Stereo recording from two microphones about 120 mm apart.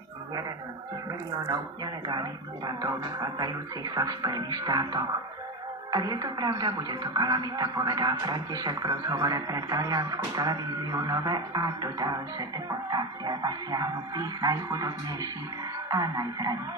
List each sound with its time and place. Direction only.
2.0 s speech: 40° right (ahead or behind)